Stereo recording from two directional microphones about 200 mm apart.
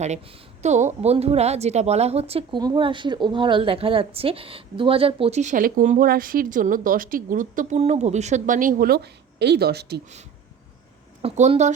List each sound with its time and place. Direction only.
0.0 s a woman's voice: 35° right (ahead or behind); by 10.0 s 55° right (ahead or behind)
11.2 s a woman's voice: 30° right (ahead or behind)